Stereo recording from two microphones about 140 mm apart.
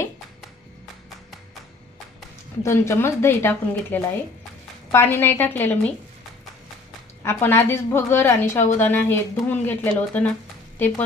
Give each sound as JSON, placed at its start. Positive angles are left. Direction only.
{"t": 2.6, "sound": "speech", "side_deg": 20}
{"t": 7.2, "sound": "speech", "side_deg": 20}
{"t": 8.5, "sound": "a woman's voice", "side_deg": 55}
{"t": 8.8, "sound": "speech", "side_deg": 15}